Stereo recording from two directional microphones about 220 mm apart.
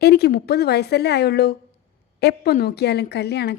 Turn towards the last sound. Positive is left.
turn(degrees=50)  # may be behind; listen again after turning